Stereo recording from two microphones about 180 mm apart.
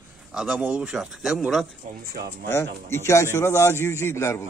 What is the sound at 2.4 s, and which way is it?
A man's voice, 15° left (ahead or behind).